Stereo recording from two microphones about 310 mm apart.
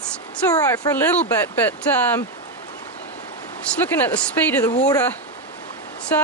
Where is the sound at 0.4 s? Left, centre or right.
Centre.